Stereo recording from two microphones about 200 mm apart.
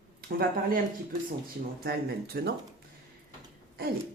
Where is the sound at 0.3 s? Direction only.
50° right (ahead or behind).